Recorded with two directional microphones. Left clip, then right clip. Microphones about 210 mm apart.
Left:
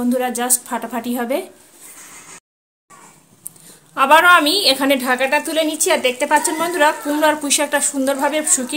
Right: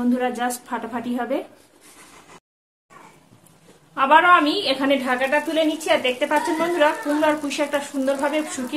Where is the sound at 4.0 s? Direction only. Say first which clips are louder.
Left 4 dB; 55° left (ahead or behind).